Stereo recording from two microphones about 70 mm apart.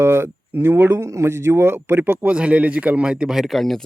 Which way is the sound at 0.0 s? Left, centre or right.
Right.